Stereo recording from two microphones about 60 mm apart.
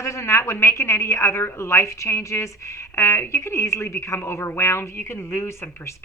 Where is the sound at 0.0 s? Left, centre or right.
Left.